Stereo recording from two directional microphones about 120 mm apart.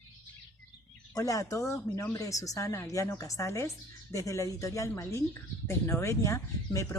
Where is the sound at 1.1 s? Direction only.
30° left (ahead or behind).